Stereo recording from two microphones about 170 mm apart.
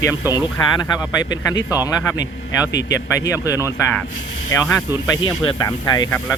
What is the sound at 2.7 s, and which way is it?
Speech, 90° left.